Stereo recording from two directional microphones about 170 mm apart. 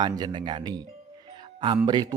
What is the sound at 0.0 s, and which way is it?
Speech, 25° right (ahead or behind).